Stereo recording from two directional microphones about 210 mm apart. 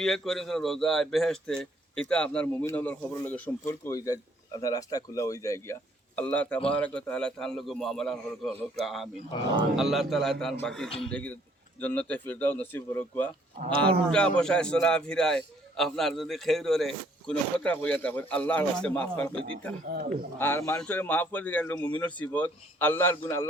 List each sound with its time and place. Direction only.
0.0 s speech: centre (ahead or behind)
9.3 s speech: 20° left (ahead or behind)
9.7 s speech: centre (ahead or behind)